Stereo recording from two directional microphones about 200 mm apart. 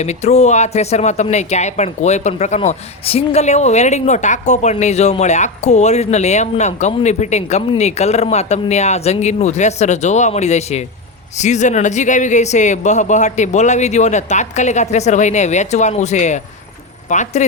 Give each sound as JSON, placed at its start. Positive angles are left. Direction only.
{"t": 0.0, "sound": "speech", "side_deg": 35}